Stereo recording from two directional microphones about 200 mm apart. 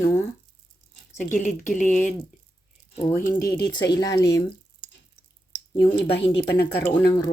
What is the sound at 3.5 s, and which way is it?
Speech, 20° left (ahead or behind).